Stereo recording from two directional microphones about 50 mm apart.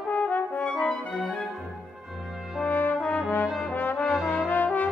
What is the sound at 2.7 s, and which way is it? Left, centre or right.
Brass instrument, left.